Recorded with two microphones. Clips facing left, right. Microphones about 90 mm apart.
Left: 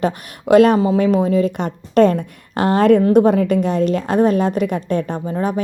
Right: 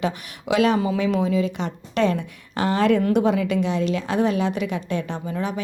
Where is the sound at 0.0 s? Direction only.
45° left (ahead or behind).